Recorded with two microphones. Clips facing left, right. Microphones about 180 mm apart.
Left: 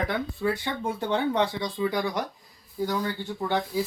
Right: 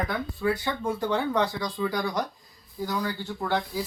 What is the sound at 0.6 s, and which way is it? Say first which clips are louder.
Speech: right 1 dB; 25° left (ahead or behind).